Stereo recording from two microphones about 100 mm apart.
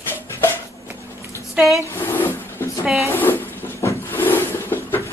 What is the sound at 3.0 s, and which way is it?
Train, 20° left (ahead or behind).